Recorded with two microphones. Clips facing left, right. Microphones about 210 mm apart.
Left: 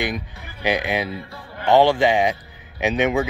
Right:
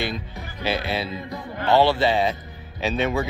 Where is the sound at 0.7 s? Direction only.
15° left (ahead or behind).